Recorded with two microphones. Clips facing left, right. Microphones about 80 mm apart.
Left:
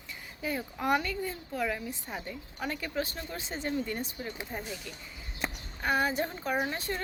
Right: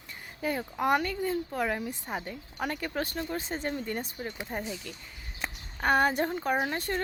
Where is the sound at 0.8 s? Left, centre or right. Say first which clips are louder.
Right 3 dB; right.